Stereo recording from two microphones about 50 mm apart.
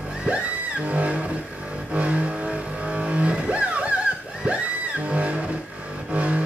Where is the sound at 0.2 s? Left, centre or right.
Right.